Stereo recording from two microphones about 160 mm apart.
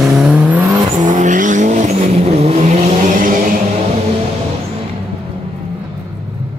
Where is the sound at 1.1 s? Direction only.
50° right (ahead or behind).